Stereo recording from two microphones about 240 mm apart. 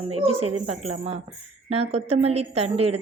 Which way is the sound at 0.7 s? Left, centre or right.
Right.